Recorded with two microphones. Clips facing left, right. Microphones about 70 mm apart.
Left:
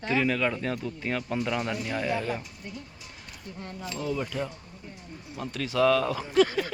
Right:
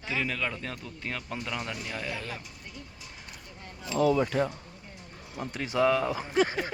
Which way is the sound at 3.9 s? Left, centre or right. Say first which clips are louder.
Right 7 dB; right.